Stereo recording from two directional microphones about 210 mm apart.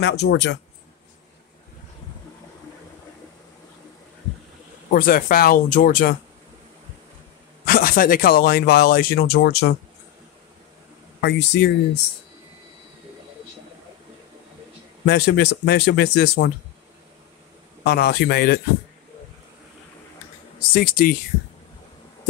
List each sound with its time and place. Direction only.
0.0 s speech: 55° left (ahead or behind)
4.9 s speech: 40° left (ahead or behind)
7.6 s speech: 45° left (ahead or behind)
11.1 s speech: 55° left (ahead or behind)
15.0 s speech: 50° left (ahead or behind)
17.8 s speech: 50° left (ahead or behind)
20.7 s speech: 45° left (ahead or behind)